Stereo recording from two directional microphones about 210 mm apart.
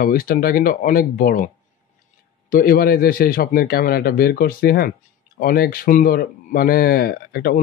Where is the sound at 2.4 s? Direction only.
45° left (ahead or behind).